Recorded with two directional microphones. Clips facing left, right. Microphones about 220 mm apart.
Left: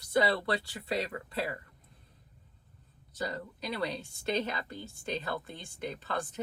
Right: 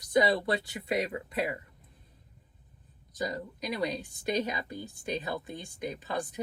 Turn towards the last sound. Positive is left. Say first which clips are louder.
# right 2 dB
turn(degrees=-15)  # may be behind; listen again after turning